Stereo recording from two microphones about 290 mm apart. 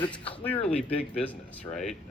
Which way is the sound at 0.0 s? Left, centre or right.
Centre.